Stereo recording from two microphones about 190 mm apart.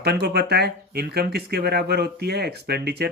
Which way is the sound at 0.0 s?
60° right (ahead or behind).